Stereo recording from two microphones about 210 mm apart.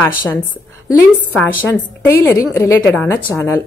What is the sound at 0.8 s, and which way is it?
A woman's voice, 5° left (ahead or behind).